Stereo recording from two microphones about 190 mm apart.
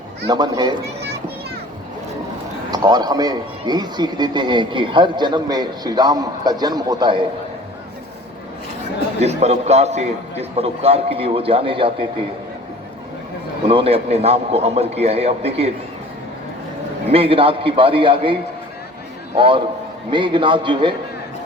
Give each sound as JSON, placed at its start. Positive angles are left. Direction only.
{"t": 0.3, "sound": "a man's voice", "side_deg": -20}
{"t": 2.6, "sound": "a man's voice", "side_deg": -20}
{"t": 9.2, "sound": "a man's voice", "side_deg": -35}
{"t": 13.7, "sound": "a man's voice", "side_deg": -30}
{"t": 17.1, "sound": "a man's voice", "side_deg": -30}
{"t": 19.4, "sound": "a man's voice", "side_deg": -25}